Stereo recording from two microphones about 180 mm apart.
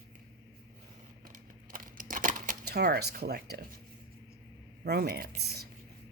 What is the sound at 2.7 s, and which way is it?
Speech, 60° right (ahead or behind).